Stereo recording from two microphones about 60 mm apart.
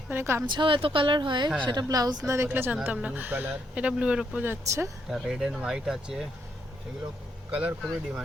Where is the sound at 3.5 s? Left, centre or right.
Right.